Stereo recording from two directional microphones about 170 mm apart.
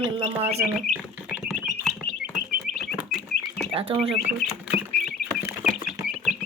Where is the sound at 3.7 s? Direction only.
35° right (ahead or behind).